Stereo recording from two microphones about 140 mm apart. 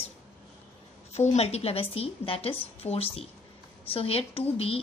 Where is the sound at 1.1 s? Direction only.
50° left (ahead or behind).